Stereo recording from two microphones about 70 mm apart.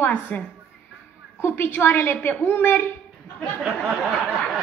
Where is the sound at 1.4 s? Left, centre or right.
Left.